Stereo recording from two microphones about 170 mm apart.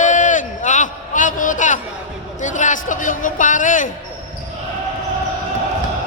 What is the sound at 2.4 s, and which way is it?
A man's voice, 45° left (ahead or behind).